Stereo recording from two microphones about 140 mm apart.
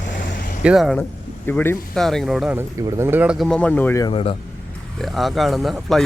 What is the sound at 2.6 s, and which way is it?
Speech, 15° right (ahead or behind).